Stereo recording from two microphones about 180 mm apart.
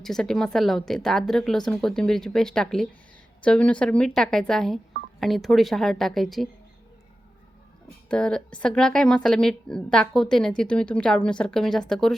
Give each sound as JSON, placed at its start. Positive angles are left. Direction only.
{"t": 0.0, "sound": "a woman's voice", "side_deg": 0}
{"t": 8.1, "sound": "a woman's voice", "side_deg": 5}